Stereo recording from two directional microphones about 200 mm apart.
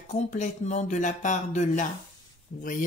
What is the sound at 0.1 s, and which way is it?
Speech, 35° left (ahead or behind).